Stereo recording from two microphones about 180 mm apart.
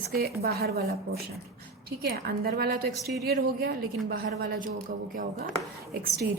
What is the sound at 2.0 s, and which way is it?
Speech, 60° right (ahead or behind).